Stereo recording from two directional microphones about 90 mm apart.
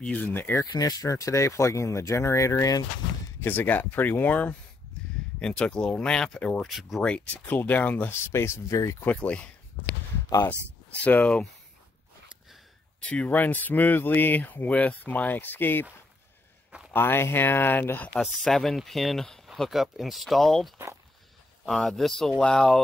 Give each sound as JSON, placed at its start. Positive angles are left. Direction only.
{"t": 0.0, "sound": "speech", "side_deg": 15}
{"t": 0.7, "sound": "speech", "side_deg": 45}
{"t": 3.3, "sound": "speech", "side_deg": 25}
{"t": 6.7, "sound": "speech", "side_deg": 0}
{"t": 7.0, "sound": "speech", "side_deg": 15}
{"t": 9.0, "sound": "speech", "side_deg": 15}
{"t": 10.3, "sound": "speech", "side_deg": 45}
{"t": 10.9, "sound": "speech", "side_deg": 15}
{"t": 13.0, "sound": "speech", "side_deg": 15}
{"t": 16.9, "sound": "speech", "side_deg": 25}
{"t": 18.2, "sound": "speech", "side_deg": 0}